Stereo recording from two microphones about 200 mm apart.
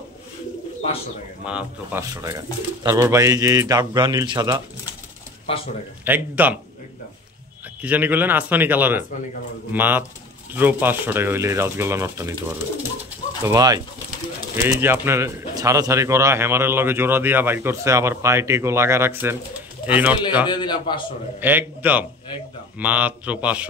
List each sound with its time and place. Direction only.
1.4 s speech: 5° right (ahead or behind)
5.5 s a man's voice: 25° left (ahead or behind)
6.0 s speech: 10° right (ahead or behind)
7.8 s speech: 10° right (ahead or behind)
20.4 s a man's voice: 20° left (ahead or behind)
21.4 s speech: 10° right (ahead or behind)